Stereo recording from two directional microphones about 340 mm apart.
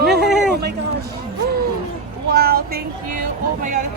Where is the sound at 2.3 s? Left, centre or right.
Right.